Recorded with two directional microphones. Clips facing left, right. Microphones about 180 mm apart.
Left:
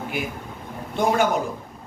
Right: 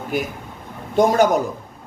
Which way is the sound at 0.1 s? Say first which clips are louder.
Right 4 dB; 40° right (ahead or behind).